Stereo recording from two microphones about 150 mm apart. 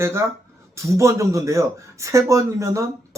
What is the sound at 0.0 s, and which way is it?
Speech, 20° right (ahead or behind).